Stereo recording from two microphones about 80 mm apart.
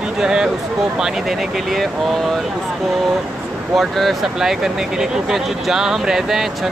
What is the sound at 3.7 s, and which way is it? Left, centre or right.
Speech, centre.